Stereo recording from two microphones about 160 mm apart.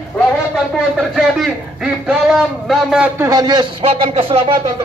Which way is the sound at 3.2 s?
25° right (ahead or behind).